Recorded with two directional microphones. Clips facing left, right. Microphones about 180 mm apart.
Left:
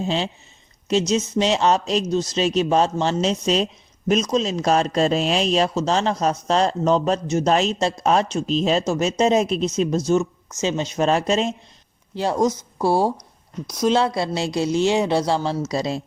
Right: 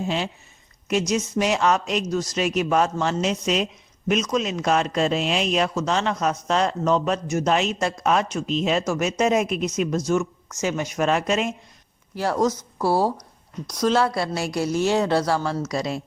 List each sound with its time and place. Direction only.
0.0 s speech: 30° left (ahead or behind)
13.7 s a woman's voice: 10° left (ahead or behind)
13.9 s speech: 20° left (ahead or behind)